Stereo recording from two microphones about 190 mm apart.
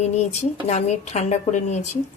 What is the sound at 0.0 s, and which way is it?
A woman's voice, 35° left (ahead or behind).